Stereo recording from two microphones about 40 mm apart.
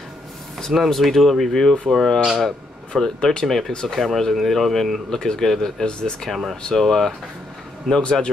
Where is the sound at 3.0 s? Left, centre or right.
Centre.